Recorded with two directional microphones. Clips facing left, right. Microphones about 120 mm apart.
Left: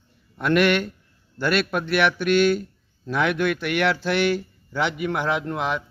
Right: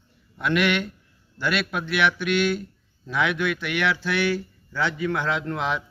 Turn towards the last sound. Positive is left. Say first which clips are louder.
# left 1 dB
turn(degrees=5)  # may be behind; listen again after turning